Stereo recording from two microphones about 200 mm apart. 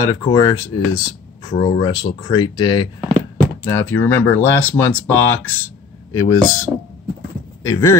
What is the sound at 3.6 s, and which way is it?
Speech, 10° left (ahead or behind).